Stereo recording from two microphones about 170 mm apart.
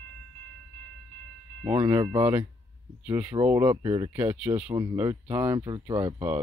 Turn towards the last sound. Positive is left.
turn(degrees=-25)  # may be behind; listen again after turning